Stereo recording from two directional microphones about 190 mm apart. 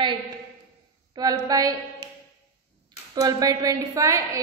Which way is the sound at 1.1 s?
20° right (ahead or behind).